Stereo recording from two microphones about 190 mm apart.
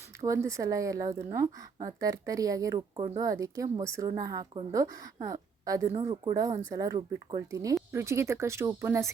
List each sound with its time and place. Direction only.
0.2 s a woman's voice: 15° right (ahead or behind)